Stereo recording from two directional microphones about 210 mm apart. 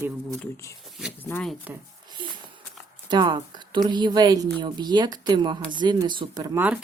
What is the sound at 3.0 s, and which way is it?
A woman's voice, 20° right (ahead or behind).